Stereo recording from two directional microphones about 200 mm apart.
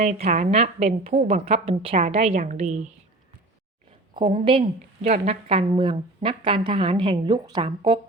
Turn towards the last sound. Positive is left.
turn(degrees=-20)  # may be behind; listen again after turning